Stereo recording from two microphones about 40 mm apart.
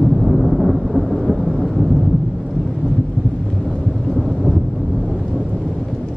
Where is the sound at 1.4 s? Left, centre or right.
Centre.